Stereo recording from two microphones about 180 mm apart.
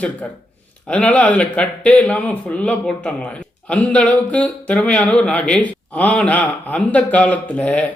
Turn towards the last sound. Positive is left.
turn(degrees=5)  # may be behind; listen again after turning